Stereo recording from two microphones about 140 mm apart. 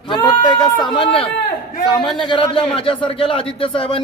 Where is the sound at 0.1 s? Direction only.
30° left (ahead or behind).